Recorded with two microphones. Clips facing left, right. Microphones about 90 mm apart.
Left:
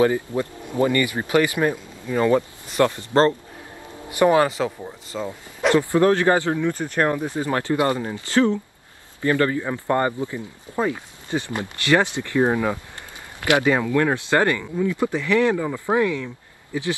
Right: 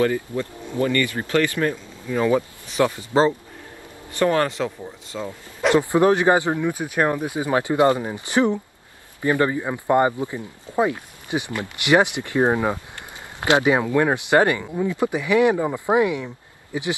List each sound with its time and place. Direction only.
0.0 s speech: 20° left (ahead or behind)
2.1 s speech: centre (ahead or behind)
4.1 s speech: 10° left (ahead or behind)
5.8 s speech: 20° right (ahead or behind)